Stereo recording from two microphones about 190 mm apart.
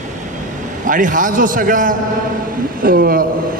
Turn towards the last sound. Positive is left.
turn(degrees=-50)  # may be behind; listen again after turning